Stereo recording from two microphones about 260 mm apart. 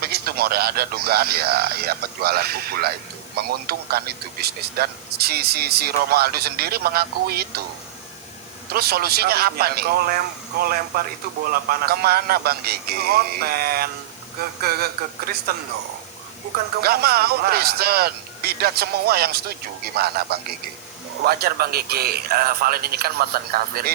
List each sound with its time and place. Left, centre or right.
0.0 s speech: right
8.7 s speech: right
16.8 s speech: right